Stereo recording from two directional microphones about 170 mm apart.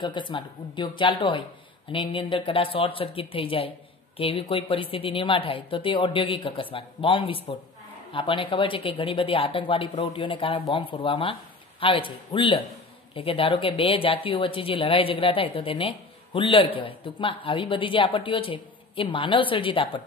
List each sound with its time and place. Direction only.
0.0 s speech: 30° left (ahead or behind)